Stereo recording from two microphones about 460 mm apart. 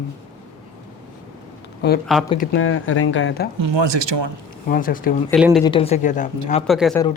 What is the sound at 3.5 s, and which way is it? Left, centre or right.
Speech, right.